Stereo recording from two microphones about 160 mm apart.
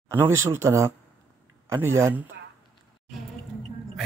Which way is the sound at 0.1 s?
15° right (ahead or behind).